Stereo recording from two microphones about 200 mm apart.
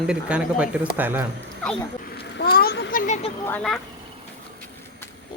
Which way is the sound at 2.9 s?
40° left (ahead or behind).